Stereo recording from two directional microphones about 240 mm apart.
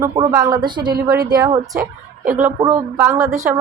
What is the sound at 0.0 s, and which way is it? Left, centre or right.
A woman's voice, centre.